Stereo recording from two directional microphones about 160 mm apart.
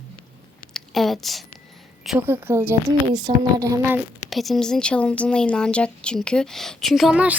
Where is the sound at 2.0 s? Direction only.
10° right (ahead or behind).